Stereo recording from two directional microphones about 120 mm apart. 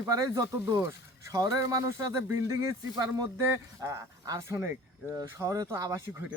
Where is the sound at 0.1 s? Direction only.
25° right (ahead or behind).